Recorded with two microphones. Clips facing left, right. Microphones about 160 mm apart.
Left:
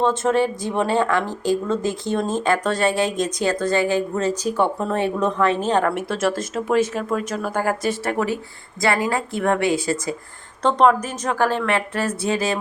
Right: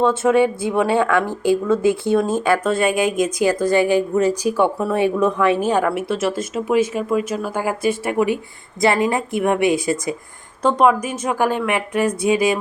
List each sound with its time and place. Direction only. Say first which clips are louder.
0.1 s a woman's voice: right 4 dB; 10° right (ahead or behind)
1.2 s speech: right 4 dB; 55° right (ahead or behind)
1.6 s a woman's voice: right 6 dB; 10° right (ahead or behind)